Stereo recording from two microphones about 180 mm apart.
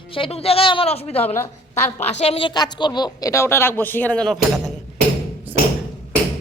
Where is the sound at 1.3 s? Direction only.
10° left (ahead or behind).